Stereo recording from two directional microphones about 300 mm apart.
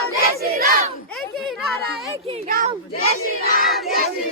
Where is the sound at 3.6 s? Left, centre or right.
Centre.